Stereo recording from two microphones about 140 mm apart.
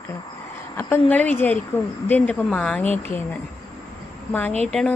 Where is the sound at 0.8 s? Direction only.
15° left (ahead or behind).